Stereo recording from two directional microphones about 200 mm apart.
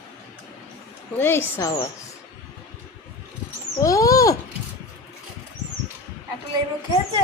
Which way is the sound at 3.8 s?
15° left (ahead or behind).